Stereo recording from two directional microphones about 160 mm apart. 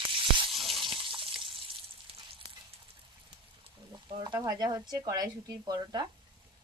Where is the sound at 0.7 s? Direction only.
30° right (ahead or behind).